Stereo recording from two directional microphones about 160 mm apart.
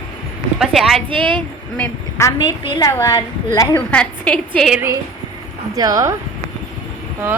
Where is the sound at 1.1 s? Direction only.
30° right (ahead or behind).